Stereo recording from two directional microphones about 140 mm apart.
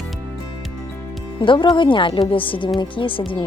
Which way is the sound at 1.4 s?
35° left (ahead or behind).